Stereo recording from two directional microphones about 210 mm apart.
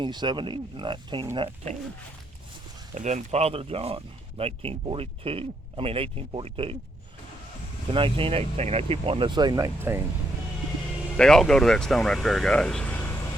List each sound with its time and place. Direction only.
0.0 s speech: 20° right (ahead or behind)
2.9 s speech: 35° right (ahead or behind)
7.9 s speech: 25° right (ahead or behind)
11.2 s speech: 5° left (ahead or behind)